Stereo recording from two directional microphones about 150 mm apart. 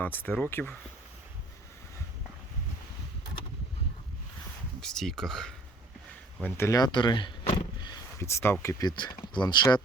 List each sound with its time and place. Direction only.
0.0 s speech: 10° left (ahead or behind)
4.8 s speech: 5° left (ahead or behind)
6.4 s speech: 20° left (ahead or behind)
8.2 s speech: 15° left (ahead or behind)
8.6 s speech: 30° left (ahead or behind)